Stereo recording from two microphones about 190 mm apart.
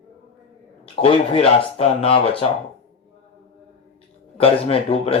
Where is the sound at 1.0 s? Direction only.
30° left (ahead or behind).